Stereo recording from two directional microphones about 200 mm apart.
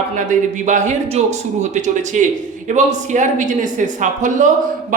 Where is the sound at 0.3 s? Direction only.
40° right (ahead or behind).